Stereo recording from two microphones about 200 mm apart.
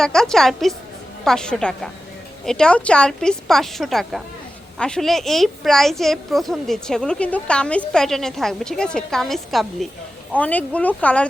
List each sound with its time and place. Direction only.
0.0 s a woman's voice: 5° left (ahead or behind)